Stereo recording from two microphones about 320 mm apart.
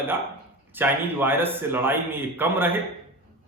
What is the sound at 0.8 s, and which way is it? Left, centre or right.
A man's voice, centre.